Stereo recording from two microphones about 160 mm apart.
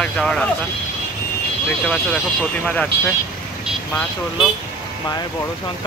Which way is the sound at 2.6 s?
5° left (ahead or behind).